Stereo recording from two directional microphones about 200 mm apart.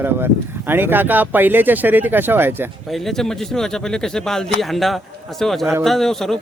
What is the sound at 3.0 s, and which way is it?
Speech, centre (ahead or behind).